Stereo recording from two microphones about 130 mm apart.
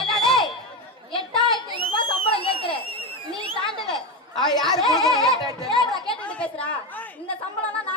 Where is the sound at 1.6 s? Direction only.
40° left (ahead or behind).